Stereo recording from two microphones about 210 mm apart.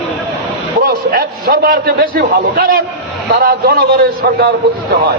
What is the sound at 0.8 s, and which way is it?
A man's voice, 45° right (ahead or behind).